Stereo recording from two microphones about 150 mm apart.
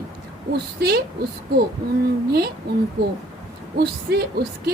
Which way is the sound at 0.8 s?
90° right.